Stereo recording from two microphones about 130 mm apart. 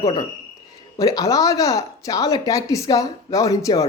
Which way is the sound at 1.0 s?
25° left (ahead or behind).